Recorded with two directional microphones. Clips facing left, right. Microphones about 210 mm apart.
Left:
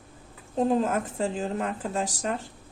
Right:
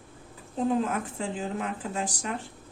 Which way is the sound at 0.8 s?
40° left (ahead or behind).